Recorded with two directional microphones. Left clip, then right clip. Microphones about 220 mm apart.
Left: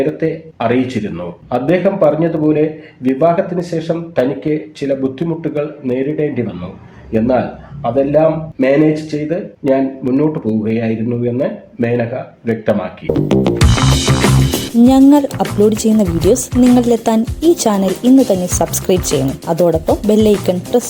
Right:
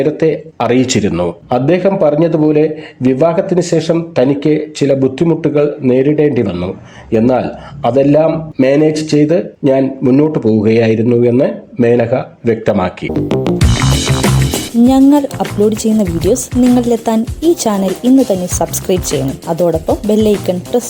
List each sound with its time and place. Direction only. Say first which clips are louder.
0.0 s a man's voice: right 4 dB; 50° right (ahead or behind)
13.2 s speech: even; centre (ahead or behind)